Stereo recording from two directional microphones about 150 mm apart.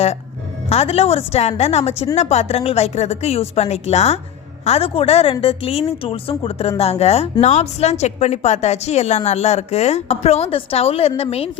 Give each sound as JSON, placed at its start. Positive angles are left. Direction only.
{"t": 0.7, "sound": "a woman's voice", "side_deg": 40}